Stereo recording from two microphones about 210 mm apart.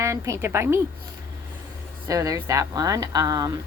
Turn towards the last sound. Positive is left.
turn(degrees=-15)  # may be behind; listen again after turning